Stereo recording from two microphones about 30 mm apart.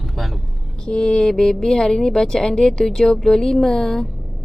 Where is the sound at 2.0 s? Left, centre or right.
Centre.